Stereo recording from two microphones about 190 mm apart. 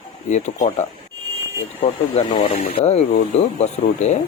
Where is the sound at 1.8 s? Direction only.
35° left (ahead or behind).